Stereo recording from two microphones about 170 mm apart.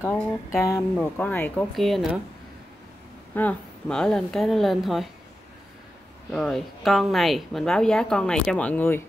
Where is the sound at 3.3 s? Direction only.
5° left (ahead or behind).